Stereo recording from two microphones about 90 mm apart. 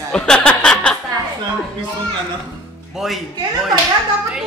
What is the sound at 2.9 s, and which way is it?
Speech, 5° right (ahead or behind).